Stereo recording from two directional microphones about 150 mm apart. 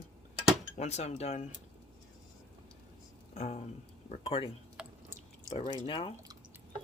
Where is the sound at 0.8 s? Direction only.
45° left (ahead or behind).